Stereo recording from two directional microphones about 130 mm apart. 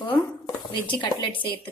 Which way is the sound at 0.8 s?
40° left (ahead or behind).